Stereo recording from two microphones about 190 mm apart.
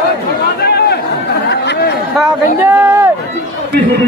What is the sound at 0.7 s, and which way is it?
Chatter, 55° left (ahead or behind).